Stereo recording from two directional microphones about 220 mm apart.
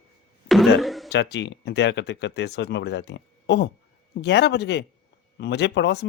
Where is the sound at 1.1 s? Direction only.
50° left (ahead or behind).